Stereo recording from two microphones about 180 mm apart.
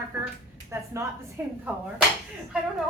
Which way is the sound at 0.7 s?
15° right (ahead or behind).